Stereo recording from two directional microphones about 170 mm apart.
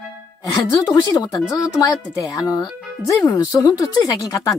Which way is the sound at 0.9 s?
20° left (ahead or behind).